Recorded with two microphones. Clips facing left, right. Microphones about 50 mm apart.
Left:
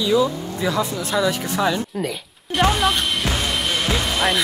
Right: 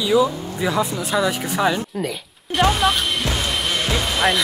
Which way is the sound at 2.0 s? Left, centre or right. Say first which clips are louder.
Even; centre.